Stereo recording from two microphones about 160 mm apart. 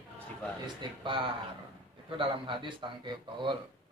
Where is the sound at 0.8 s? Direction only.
30° right (ahead or behind).